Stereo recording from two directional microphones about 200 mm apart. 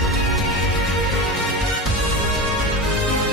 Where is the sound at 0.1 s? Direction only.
Centre (ahead or behind).